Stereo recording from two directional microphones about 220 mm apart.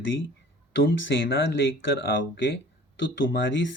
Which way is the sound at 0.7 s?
55° left (ahead or behind).